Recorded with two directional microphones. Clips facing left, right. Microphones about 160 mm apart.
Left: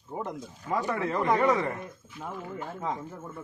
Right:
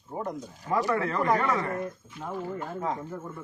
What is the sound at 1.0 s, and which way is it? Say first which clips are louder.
Speech: even; 20° left (ahead or behind).